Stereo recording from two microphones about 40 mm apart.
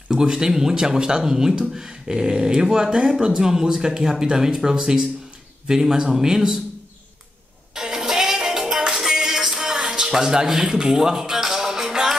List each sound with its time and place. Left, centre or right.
0.1 s speech: centre
7.7 s music: centre